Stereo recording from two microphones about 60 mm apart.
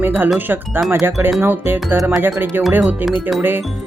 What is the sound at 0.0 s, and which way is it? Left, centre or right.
Speech, right.